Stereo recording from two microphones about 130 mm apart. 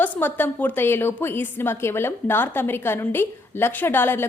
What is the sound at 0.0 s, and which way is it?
A woman's voice, 15° left (ahead or behind).